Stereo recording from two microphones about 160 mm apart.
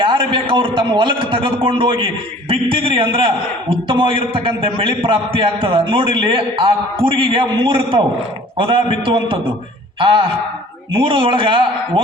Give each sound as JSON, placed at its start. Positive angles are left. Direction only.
{"t": 0.0, "sound": "a man's voice", "side_deg": -30}